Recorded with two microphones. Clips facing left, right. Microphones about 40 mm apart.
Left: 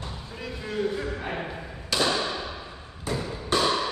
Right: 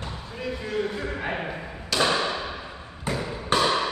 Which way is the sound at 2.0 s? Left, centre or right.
Right.